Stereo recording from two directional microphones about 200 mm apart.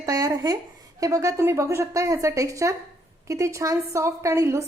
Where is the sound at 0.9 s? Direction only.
15° right (ahead or behind).